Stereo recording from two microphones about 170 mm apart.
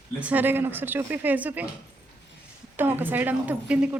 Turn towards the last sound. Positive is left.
turn(degrees=-10)  # may be behind; listen again after turning